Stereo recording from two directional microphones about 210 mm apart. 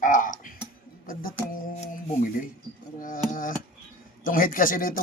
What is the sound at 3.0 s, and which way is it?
Speech, 40° left (ahead or behind).